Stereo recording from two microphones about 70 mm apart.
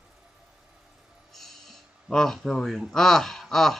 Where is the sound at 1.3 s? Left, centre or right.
Centre.